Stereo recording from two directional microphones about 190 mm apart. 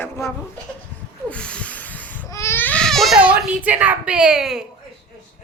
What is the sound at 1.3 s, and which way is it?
Baby cry, 5° left (ahead or behind).